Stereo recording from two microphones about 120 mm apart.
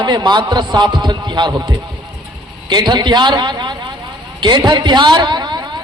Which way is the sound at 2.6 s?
35° right (ahead or behind).